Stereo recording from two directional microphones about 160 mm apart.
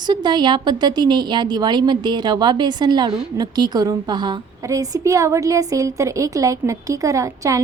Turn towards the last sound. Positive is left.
turn(degrees=-20)  # may be behind; listen again after turning